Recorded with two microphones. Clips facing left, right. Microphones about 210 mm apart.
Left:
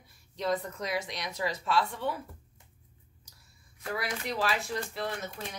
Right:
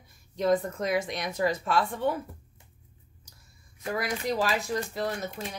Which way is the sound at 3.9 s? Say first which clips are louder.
Right 5 dB; 45° right (ahead or behind).